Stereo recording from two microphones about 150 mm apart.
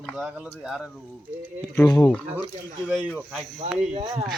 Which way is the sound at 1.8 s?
30° left (ahead or behind).